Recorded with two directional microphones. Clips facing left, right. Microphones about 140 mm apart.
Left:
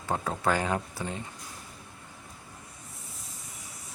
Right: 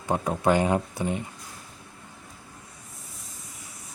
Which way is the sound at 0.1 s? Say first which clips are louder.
Right 5 dB; 20° right (ahead or behind).